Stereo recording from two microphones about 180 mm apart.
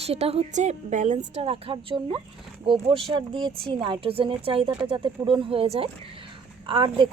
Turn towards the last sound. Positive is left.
turn(degrees=-25)  # may be behind; listen again after turning